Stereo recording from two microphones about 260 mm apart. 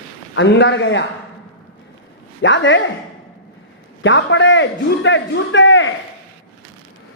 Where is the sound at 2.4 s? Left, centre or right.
Left.